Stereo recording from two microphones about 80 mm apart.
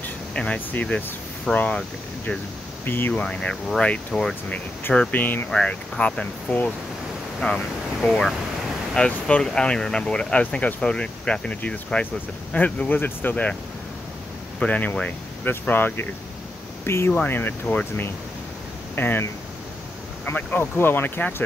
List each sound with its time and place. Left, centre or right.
0.3 s speech: centre
2.8 s speech: left; by 4.6 s centre
5.1 s speech: left
5.5 s speech: centre
14.6 s speech: centre
20.2 s speech: left